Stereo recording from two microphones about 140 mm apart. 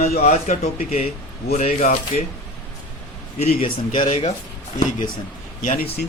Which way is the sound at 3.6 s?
70° left (ahead or behind).